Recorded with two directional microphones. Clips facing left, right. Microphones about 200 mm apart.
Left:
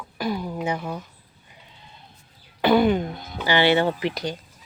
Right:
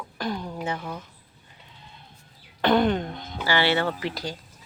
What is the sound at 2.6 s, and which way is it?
Speech, 5° left (ahead or behind).